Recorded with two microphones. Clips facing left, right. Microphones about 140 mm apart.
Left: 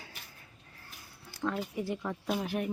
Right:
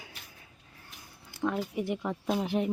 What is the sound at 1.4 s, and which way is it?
A woman's voice, 15° right (ahead or behind).